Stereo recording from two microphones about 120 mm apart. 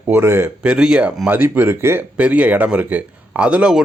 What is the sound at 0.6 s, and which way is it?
Speech, 10° right (ahead or behind).